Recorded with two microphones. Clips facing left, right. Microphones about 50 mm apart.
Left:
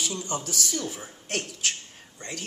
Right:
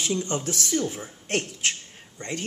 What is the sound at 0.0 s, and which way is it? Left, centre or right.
Speech, right.